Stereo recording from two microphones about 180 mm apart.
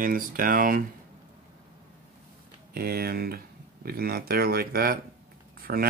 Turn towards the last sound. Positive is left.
turn(degrees=-55)  # may be behind; listen again after turning